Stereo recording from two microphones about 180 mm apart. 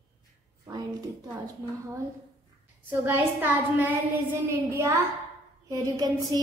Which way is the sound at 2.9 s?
10° right (ahead or behind).